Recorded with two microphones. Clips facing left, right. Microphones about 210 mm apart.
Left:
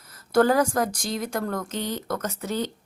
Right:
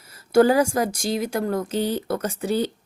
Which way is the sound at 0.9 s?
25° right (ahead or behind).